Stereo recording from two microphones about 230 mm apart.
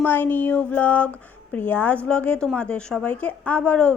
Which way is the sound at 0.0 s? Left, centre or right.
Centre.